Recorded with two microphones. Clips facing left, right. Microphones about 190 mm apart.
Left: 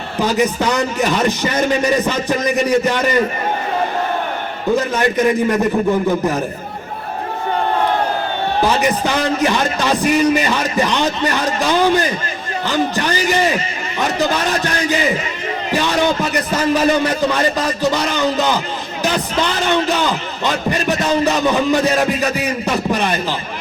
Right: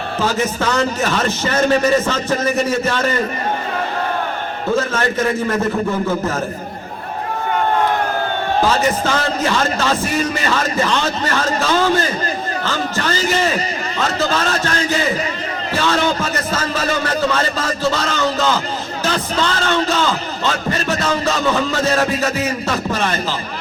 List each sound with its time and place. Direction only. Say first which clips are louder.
0.2 s a man's voice: left 3 dB; 15° left (ahead or behind)
4.7 s a man's voice: left 2 dB; 15° left (ahead or behind)
8.6 s a man's voice: left 1 dB; 15° left (ahead or behind)